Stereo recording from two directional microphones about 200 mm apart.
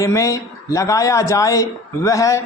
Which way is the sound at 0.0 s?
15° left (ahead or behind).